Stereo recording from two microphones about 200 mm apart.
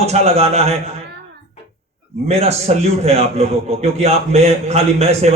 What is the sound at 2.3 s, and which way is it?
A man's voice, 30° right (ahead or behind).